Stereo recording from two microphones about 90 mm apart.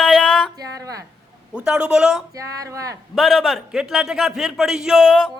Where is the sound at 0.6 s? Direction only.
40° right (ahead or behind).